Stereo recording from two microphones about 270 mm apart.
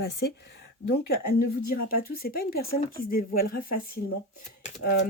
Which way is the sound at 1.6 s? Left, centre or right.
Left.